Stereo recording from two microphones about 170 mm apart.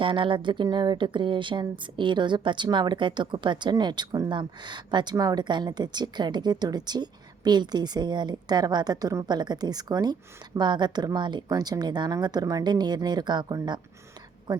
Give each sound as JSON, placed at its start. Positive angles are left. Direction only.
{"t": 0.0, "sound": "a woman's voice", "side_deg": -30}